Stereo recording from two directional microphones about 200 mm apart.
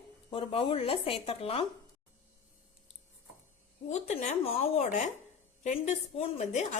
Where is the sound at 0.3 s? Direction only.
25° left (ahead or behind).